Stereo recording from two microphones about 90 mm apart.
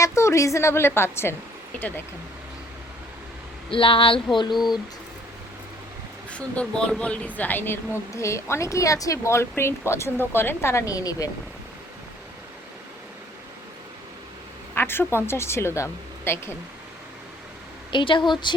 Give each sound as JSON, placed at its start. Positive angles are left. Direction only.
{"t": 0.0, "sound": "a woman's voice", "side_deg": 35}
{"t": 3.7, "sound": "speech", "side_deg": 75}
{"t": 6.3, "sound": "a woman's voice", "side_deg": 15}
{"t": 14.8, "sound": "a woman's voice", "side_deg": 25}
{"t": 17.9, "sound": "speech", "side_deg": 65}